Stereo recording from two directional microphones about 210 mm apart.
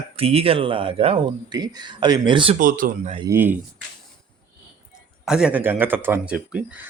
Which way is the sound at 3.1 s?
20° right (ahead or behind).